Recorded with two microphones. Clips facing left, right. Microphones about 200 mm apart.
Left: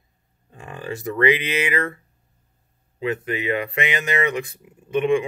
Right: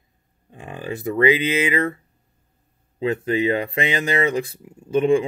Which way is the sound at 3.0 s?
30° right (ahead or behind).